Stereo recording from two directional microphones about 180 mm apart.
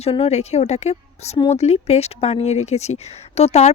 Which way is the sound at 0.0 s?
35° left (ahead or behind).